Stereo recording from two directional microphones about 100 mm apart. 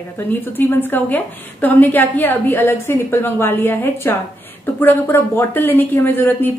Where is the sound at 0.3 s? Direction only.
20° left (ahead or behind).